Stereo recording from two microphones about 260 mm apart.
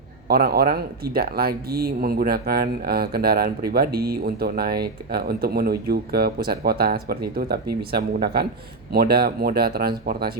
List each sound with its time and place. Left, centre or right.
0.3 s speech: right